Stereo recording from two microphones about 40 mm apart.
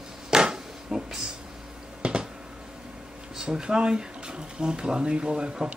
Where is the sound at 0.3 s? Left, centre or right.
Centre.